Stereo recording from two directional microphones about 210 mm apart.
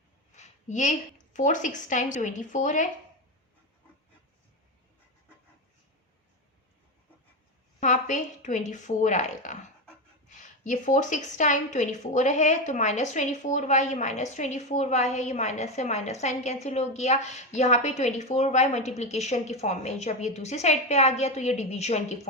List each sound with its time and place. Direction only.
0.3 s a woman's voice: 35° left (ahead or behind)
7.8 s a woman's voice: 35° left (ahead or behind)